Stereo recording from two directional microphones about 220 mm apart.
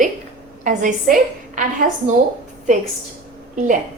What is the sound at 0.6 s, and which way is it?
A woman's voice, 35° right (ahead or behind).